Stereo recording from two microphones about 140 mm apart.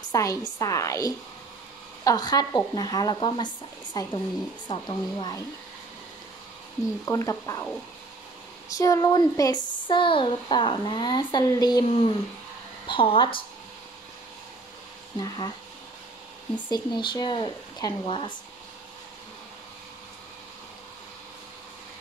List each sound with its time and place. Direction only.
0.1 s speech: 25° left (ahead or behind)
7.1 s speech: 25° left (ahead or behind)
8.6 s speech: 25° left (ahead or behind)
12.8 s speech: 40° left (ahead or behind)
15.1 s speech: 30° left (ahead or behind)
16.5 s speech: 35° left (ahead or behind)